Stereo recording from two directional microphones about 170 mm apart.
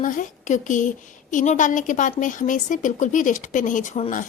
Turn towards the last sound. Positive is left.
turn(degrees=45)  # may be behind; listen again after turning